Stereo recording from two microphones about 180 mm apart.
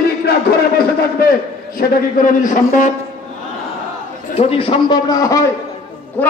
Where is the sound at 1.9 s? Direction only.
50° left (ahead or behind).